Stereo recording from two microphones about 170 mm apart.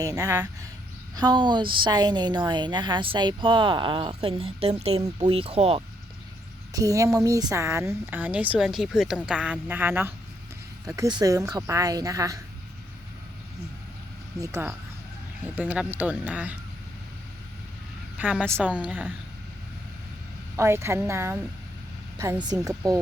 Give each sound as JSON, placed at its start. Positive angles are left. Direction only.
{"t": 0.0, "sound": "a woman's voice", "side_deg": -20}
{"t": 6.7, "sound": "a woman's voice", "side_deg": -20}
{"t": 14.4, "sound": "speech", "side_deg": -15}
{"t": 18.2, "sound": "a woman's voice", "side_deg": -5}
{"t": 20.6, "sound": "a woman's voice", "side_deg": -15}